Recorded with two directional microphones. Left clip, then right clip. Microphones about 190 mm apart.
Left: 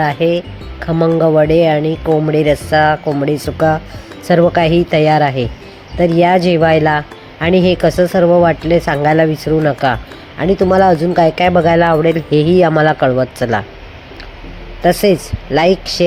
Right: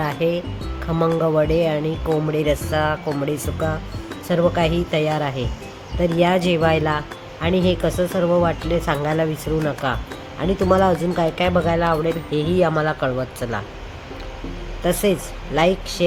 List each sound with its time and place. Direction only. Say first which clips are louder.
0.0 s speech: left 8 dB; 15° left (ahead or behind)
14.8 s speech: left 9 dB; 20° left (ahead or behind)